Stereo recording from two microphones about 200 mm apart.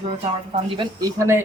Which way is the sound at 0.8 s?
20° right (ahead or behind).